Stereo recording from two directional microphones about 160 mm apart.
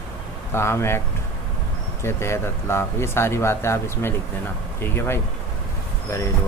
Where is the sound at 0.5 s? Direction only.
15° left (ahead or behind).